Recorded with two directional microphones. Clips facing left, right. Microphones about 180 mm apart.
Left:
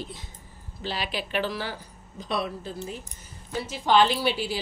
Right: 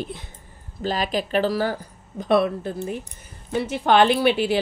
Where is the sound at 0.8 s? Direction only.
45° right (ahead or behind).